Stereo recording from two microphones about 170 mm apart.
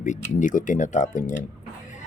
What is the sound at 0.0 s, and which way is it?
Speech, 45° left (ahead or behind).